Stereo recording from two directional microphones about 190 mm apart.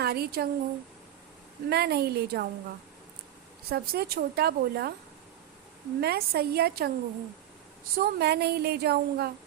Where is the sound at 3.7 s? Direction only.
55° right (ahead or behind).